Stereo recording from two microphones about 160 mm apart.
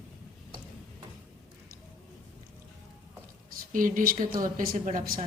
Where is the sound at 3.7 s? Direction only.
55° right (ahead or behind).